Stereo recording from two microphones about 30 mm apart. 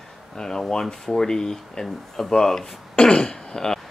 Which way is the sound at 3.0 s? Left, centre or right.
Left.